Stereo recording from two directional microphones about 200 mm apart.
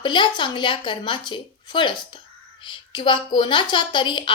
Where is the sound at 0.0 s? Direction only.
25° left (ahead or behind).